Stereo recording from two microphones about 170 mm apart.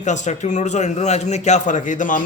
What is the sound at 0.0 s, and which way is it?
A man's voice, 45° left (ahead or behind).